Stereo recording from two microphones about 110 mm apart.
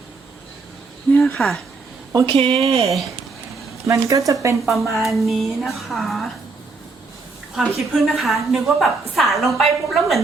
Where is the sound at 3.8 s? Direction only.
30° right (ahead or behind).